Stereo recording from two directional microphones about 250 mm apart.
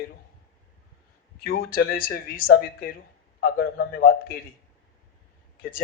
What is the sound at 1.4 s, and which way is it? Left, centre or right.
A man's voice, left.